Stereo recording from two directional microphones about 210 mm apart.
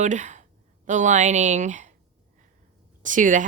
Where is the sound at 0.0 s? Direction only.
35° right (ahead or behind).